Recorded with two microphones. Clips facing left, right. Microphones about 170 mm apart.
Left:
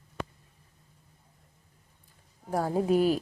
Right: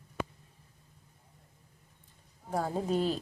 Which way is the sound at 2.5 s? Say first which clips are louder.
Left 5 dB; 10° left (ahead or behind).